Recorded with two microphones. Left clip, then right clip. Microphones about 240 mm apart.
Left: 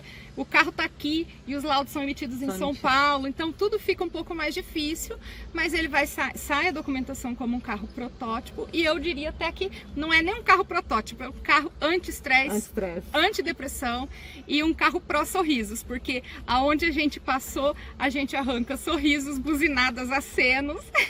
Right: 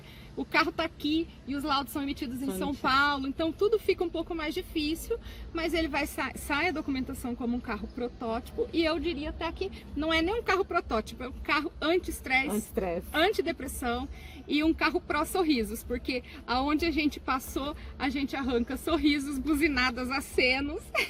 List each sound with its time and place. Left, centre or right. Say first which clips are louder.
0.5 s a woman's voice: left 5 dB; centre